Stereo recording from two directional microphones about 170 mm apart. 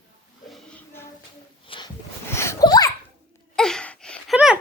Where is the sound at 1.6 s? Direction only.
30° left (ahead or behind).